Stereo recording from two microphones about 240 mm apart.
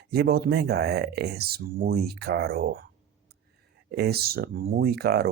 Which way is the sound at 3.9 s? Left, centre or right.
Right.